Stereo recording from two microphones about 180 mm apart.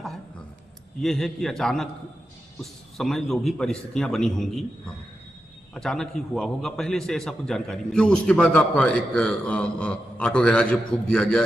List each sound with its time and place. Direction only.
1.0 s a man's voice: centre (ahead or behind)